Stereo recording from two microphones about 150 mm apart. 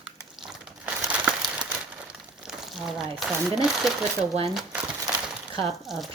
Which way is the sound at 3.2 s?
5° right (ahead or behind).